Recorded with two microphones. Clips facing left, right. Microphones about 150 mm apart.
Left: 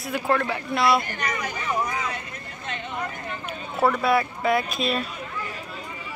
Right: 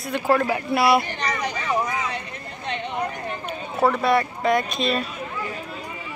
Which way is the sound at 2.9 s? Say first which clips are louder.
Right 4 dB; 35° right (ahead or behind).